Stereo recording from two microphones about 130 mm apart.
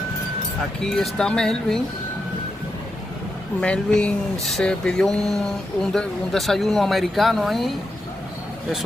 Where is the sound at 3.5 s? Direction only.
10° left (ahead or behind).